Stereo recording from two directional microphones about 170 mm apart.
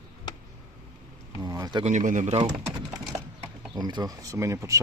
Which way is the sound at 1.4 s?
20° right (ahead or behind).